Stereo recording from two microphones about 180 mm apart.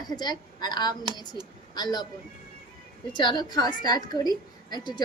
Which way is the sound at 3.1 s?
25° left (ahead or behind).